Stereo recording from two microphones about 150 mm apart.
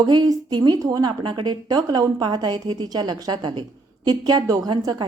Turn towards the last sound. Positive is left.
turn(degrees=-25)  # may be behind; listen again after turning